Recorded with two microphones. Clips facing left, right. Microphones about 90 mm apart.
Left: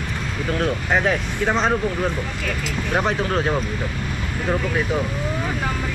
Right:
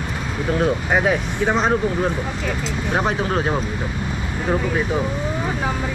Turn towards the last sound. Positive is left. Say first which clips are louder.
# right 1 dB
turn(degrees=-5)  # may be behind; listen again after turning